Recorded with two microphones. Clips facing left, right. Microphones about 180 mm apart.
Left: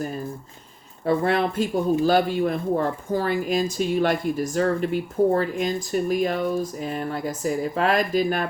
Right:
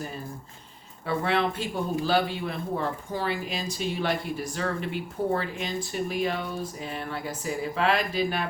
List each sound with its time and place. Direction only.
1.0 s speech: 45° left (ahead or behind)